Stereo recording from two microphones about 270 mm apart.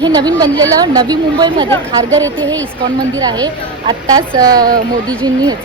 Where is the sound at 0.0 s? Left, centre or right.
Centre.